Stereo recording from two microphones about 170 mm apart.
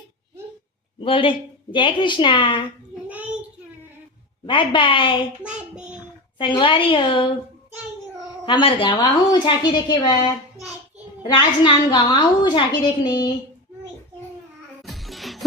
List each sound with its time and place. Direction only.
1.0 s a woman's voice: 30° left (ahead or behind)
2.9 s a sound: 10° right (ahead or behind)
4.4 s a woman's voice: 30° left (ahead or behind)
5.5 s child singing: 5° right (ahead or behind)
6.4 s a woman's voice: 30° left (ahead or behind)
8.4 s a woman's voice: 30° left (ahead or behind)
14.8 s music: centre (ahead or behind)